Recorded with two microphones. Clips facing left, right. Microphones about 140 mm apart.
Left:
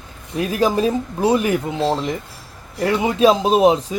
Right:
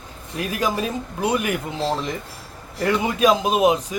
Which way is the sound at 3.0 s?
25° left (ahead or behind).